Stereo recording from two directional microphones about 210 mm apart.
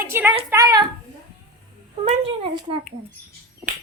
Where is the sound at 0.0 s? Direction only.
10° right (ahead or behind).